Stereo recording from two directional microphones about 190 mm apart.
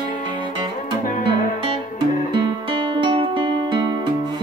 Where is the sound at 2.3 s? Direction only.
25° right (ahead or behind).